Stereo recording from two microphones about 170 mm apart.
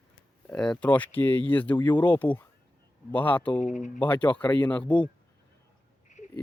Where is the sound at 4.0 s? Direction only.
10° left (ahead or behind).